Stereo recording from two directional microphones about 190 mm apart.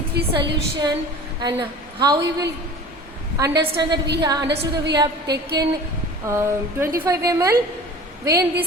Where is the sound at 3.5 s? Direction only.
60° right (ahead or behind).